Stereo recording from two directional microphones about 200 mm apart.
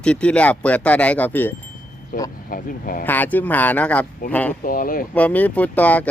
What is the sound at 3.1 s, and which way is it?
Speech, 10° left (ahead or behind).